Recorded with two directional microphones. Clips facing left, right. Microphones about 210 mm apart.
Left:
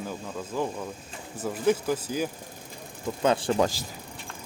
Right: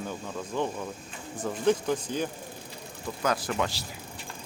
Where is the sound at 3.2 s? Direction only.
30° left (ahead or behind).